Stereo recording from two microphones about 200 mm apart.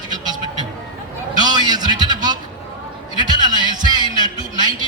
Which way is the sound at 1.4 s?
20° right (ahead or behind).